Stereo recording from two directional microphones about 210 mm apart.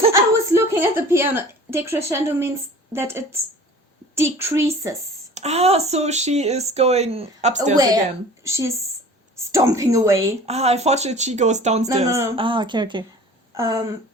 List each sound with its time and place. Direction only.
0.1 s a sound: 10° right (ahead or behind)
2.9 s a woman's voice: 10° right (ahead or behind)
5.3 s speech: 30° right (ahead or behind)
7.8 s a woman's voice: 15° right (ahead or behind)
10.4 s speech: 30° right (ahead or behind)
12.0 s a woman's voice: 15° right (ahead or behind)